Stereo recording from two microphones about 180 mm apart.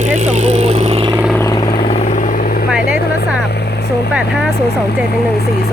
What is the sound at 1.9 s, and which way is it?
Vehicle, 35° left (ahead or behind).